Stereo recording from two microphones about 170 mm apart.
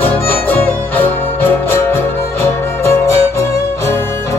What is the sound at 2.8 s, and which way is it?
Music, 15° left (ahead or behind).